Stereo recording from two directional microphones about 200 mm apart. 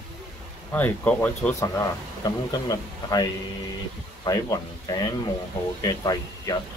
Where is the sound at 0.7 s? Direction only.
10° left (ahead or behind).